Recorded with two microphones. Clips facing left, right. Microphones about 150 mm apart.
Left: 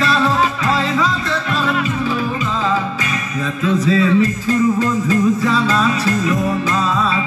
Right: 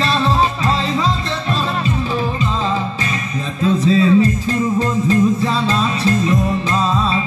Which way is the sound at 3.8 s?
25° right (ahead or behind).